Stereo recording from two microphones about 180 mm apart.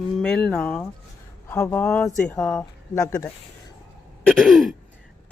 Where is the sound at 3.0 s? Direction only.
20° left (ahead or behind).